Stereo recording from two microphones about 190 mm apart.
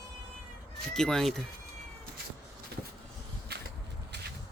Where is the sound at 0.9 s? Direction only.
5° left (ahead or behind).